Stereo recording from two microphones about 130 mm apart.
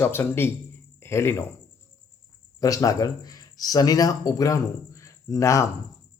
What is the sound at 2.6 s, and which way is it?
Speech, 25° left (ahead or behind).